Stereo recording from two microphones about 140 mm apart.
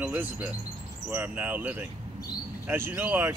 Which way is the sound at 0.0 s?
10° right (ahead or behind).